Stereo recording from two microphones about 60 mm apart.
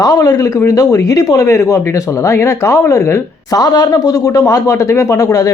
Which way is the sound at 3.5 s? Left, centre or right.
Left.